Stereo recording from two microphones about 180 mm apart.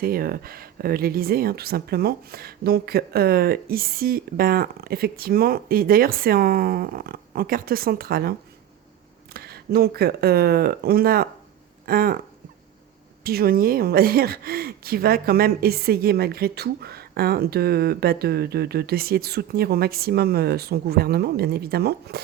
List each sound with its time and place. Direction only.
0.0 s a woman's voice: 55° right (ahead or behind)
13.2 s a woman's voice: 55° right (ahead or behind)